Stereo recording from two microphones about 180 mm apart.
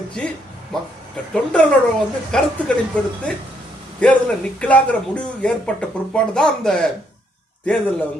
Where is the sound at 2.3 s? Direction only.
5° left (ahead or behind).